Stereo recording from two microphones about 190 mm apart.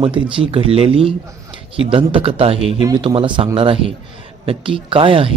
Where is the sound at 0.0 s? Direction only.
30° right (ahead or behind).